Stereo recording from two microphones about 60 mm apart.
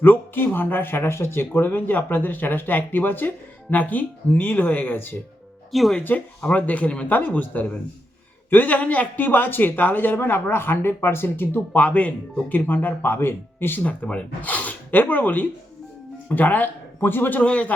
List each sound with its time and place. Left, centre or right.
0.0 s speech: left
5.7 s speech: centre
6.0 s speech: left
13.8 s speech: left
17.4 s speech: left